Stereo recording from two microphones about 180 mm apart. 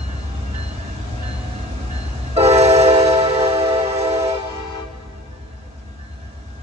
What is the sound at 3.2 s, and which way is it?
Music, 35° right (ahead or behind).